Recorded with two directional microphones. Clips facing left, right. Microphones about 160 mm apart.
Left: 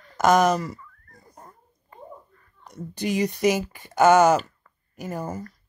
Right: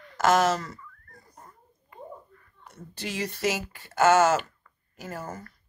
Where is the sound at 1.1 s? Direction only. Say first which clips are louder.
Left 3 dB; 35° left (ahead or behind).